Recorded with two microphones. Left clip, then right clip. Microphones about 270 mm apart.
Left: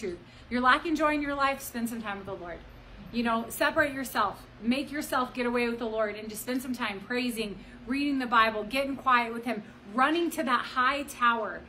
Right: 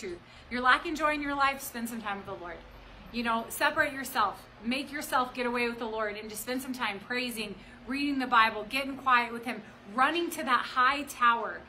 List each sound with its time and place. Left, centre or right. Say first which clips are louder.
0.0 s a woman's voice: left 3 dB; centre